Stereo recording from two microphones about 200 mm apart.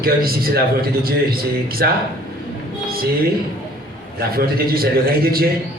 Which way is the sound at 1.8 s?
50° right (ahead or behind).